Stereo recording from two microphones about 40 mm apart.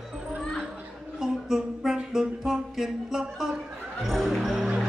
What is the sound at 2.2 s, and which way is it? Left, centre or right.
Music, centre.